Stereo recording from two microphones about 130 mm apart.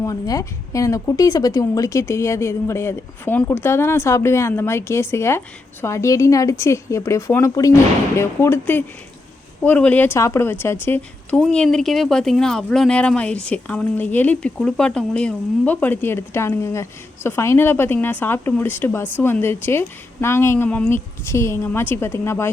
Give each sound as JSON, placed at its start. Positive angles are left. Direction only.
{"t": 0.0, "sound": "a woman's voice", "side_deg": 25}